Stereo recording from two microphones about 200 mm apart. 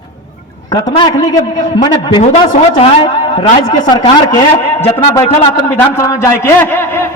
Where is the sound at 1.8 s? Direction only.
20° left (ahead or behind).